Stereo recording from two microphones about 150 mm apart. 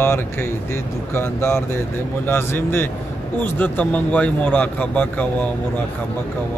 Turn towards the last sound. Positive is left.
turn(degrees=10)  # may be behind; listen again after turning